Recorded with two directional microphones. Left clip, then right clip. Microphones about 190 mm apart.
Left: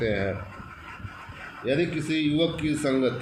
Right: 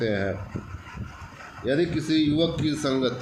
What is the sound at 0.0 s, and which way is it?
Speech, 60° right (ahead or behind).